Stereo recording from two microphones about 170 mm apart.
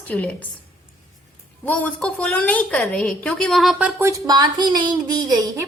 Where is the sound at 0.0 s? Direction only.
10° left (ahead or behind).